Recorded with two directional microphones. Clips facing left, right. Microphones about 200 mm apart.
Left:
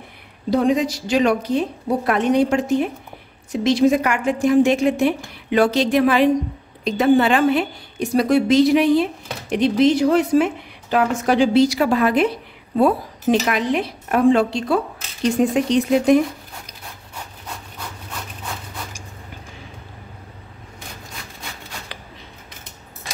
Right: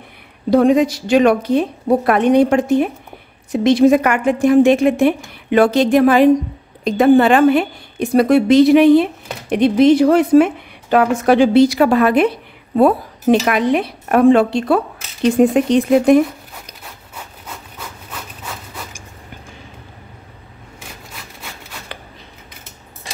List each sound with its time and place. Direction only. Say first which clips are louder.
0.5 s a woman's voice: right 6 dB; 55° right (ahead or behind)